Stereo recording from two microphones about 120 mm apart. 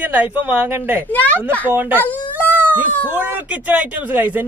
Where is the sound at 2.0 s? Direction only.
15° left (ahead or behind).